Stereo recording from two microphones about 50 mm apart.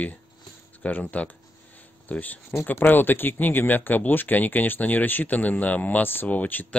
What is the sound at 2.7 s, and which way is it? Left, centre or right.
Speech, left.